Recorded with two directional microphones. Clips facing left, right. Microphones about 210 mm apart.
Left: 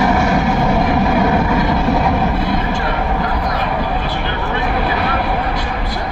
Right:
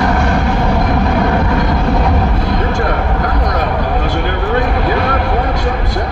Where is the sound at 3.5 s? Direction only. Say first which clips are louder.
Right 3 dB; 50° right (ahead or behind).